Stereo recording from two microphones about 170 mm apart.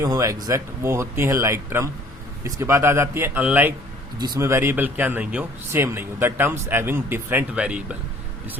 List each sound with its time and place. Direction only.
0.0 s speech: 20° right (ahead or behind)